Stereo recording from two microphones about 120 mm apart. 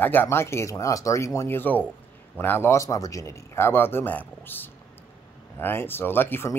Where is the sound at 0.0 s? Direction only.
15° left (ahead or behind).